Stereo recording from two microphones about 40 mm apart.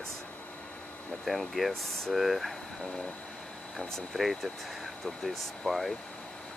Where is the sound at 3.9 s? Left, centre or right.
Centre.